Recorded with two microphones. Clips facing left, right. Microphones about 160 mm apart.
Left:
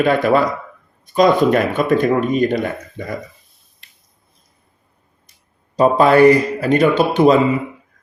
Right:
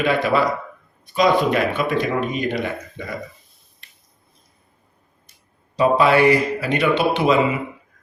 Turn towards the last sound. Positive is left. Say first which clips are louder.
# left 5 dB
turn(degrees=40)  # may be behind; listen again after turning